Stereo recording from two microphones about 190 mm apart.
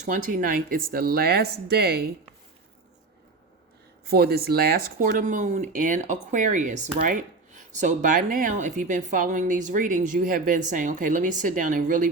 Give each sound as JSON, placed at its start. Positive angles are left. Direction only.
{"t": 0.0, "sound": "speech", "side_deg": -45}
{"t": 4.0, "sound": "speech", "side_deg": -55}